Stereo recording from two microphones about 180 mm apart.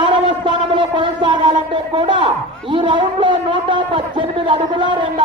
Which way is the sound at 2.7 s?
25° right (ahead or behind).